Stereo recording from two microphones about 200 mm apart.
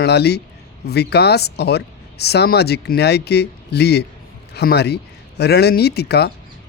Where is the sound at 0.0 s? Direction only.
55° left (ahead or behind).